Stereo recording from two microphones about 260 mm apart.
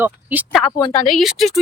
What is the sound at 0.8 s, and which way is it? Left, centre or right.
Speech, centre.